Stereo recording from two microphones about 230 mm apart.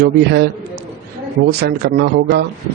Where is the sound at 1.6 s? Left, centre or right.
Right.